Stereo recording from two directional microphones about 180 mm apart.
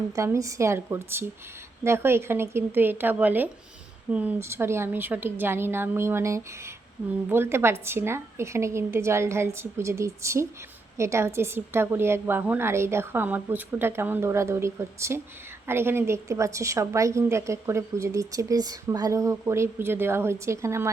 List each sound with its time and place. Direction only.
0.2 s a woman's voice: 15° right (ahead or behind)